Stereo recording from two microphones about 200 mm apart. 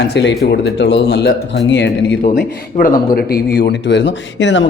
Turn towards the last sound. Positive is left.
turn(degrees=65)  # may be behind; listen again after turning